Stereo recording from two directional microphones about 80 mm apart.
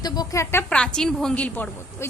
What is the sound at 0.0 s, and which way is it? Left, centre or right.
Speech, left.